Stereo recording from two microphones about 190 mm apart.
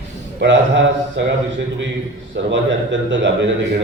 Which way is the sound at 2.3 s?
75° right (ahead or behind).